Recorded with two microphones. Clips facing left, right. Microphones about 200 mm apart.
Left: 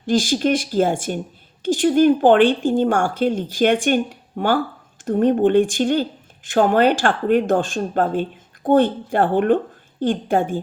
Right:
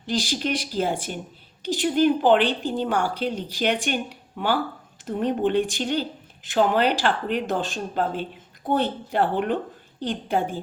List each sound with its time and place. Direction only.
0.0 s speech: 45° left (ahead or behind)